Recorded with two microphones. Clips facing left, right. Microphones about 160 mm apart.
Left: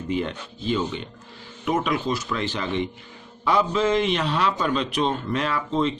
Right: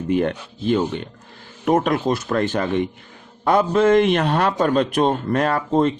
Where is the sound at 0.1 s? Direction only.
55° right (ahead or behind).